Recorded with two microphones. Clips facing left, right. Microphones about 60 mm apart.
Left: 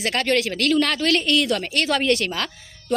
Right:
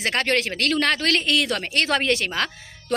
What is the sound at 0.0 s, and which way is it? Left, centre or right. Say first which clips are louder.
A woman's voice: left 1 dB; right.